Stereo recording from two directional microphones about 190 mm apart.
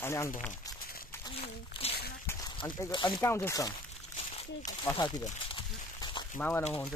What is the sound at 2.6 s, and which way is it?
Speech, 20° left (ahead or behind).